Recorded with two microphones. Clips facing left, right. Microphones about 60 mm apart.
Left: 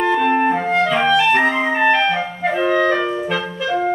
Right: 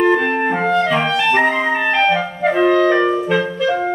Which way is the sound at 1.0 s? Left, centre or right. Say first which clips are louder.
Left 1 dB; centre.